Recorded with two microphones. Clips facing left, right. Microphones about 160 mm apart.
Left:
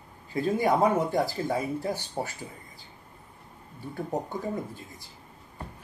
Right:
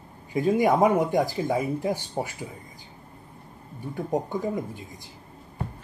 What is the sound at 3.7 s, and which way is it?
Speech, 15° right (ahead or behind).